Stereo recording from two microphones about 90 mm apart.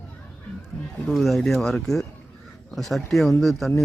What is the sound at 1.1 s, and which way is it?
Speech, centre (ahead or behind).